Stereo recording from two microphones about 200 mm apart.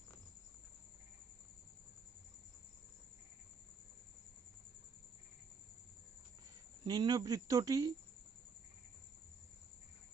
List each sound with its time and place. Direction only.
6.8 s speech: 20° right (ahead or behind)